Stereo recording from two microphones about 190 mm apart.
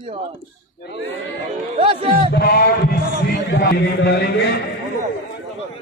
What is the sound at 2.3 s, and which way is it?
A man's voice, 55° left (ahead or behind).